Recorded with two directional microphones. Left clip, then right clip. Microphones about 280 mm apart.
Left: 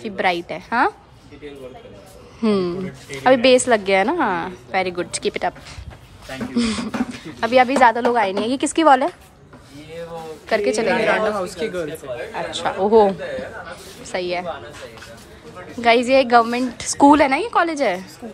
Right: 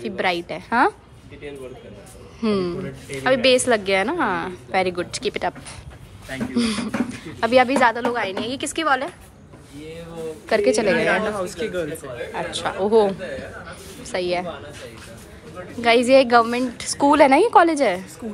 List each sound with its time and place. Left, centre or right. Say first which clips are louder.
0.0 s a woman's voice: left 2 dB; centre
2.4 s a woman's voice: left 3 dB; centre
10.5 s a woman's voice: even; centre
11.1 s speech: left 2 dB; left
12.4 s a man's voice: left 2 dB; centre
15.8 s a woman's voice: even; centre